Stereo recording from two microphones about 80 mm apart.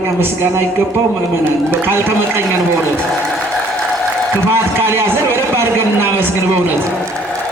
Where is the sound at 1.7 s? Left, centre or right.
Right.